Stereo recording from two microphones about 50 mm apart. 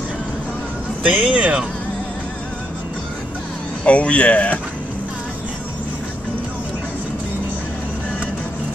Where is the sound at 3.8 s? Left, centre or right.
Left.